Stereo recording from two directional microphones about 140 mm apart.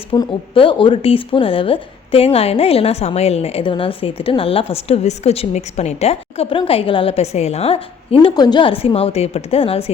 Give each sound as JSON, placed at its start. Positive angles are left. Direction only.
{"t": 0.1, "sound": "speech", "side_deg": 35}